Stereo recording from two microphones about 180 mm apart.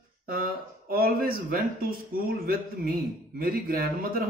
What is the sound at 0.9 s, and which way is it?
Speech, 55° right (ahead or behind).